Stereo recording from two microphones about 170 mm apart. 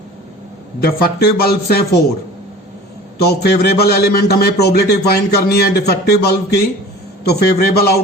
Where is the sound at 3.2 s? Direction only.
70° left (ahead or behind).